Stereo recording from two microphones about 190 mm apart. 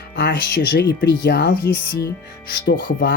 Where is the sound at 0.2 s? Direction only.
50° left (ahead or behind).